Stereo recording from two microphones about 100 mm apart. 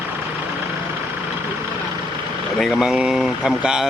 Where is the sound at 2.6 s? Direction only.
Centre (ahead or behind).